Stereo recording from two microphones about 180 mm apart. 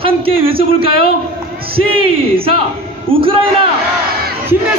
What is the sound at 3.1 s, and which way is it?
Speech, 30° right (ahead or behind).